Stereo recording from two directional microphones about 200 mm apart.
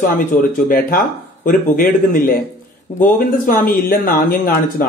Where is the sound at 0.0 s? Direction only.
45° left (ahead or behind).